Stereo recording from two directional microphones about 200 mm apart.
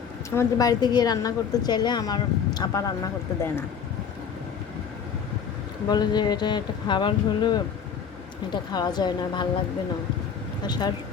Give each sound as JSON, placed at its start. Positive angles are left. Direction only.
{"t": 0.3, "sound": "a woman's voice", "side_deg": 15}
{"t": 5.9, "sound": "a woman's voice", "side_deg": 20}
{"t": 8.7, "sound": "a woman's voice", "side_deg": 20}
{"t": 10.6, "sound": "a woman's voice", "side_deg": 20}